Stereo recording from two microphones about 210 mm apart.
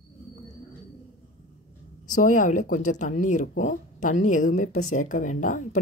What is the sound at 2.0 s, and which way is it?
Speech, 35° left (ahead or behind).